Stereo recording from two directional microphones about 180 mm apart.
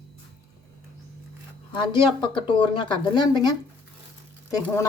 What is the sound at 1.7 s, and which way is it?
Speech, 25° left (ahead or behind).